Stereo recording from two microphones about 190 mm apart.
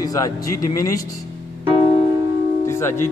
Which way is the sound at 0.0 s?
20° left (ahead or behind).